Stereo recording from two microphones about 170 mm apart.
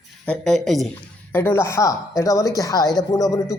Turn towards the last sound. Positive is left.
turn(degrees=20)  # may be behind; listen again after turning